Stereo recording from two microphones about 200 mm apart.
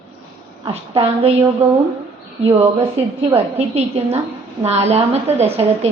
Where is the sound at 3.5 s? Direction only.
30° right (ahead or behind).